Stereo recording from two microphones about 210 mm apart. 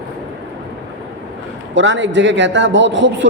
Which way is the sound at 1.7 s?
60° right (ahead or behind).